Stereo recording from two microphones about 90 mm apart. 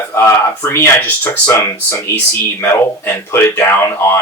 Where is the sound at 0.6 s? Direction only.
25° left (ahead or behind).